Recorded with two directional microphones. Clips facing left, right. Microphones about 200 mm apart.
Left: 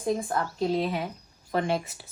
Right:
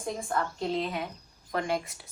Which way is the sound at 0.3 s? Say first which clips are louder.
Left 1 dB; 5° left (ahead or behind).